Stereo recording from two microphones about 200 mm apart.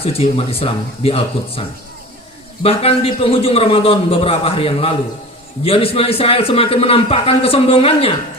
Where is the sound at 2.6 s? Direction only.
30° left (ahead or behind).